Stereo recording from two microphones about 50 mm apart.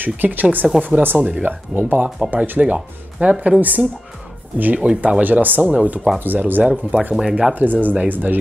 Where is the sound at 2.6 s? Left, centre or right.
Right.